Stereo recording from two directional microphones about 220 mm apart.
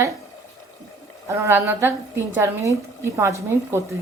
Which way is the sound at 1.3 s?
10° right (ahead or behind).